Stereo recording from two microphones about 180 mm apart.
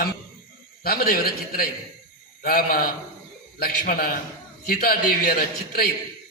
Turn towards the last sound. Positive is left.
turn(degrees=55)  # may be behind; listen again after turning